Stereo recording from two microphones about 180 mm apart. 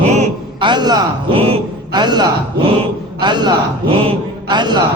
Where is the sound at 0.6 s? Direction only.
25° right (ahead or behind).